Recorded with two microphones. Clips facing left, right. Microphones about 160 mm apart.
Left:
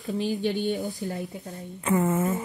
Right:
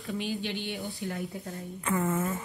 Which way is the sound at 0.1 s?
40° left (ahead or behind).